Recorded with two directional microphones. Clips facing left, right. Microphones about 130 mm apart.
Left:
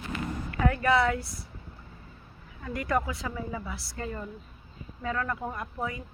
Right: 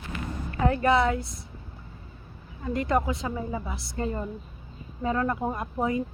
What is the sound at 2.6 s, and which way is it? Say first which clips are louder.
A woman's voice: right 4 dB; 25° right (ahead or behind).